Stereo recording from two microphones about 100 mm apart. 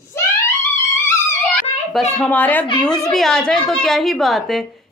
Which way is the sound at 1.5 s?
10° left (ahead or behind).